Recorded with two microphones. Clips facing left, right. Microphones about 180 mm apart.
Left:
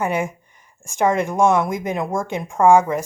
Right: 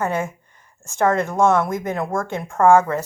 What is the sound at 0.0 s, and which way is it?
Speech, 15° left (ahead or behind).